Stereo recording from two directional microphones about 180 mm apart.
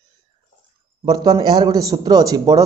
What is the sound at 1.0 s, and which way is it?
A man's voice, 25° right (ahead or behind).